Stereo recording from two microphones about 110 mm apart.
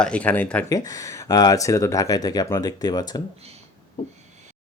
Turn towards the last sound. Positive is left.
turn(degrees=40)  # may be behind; listen again after turning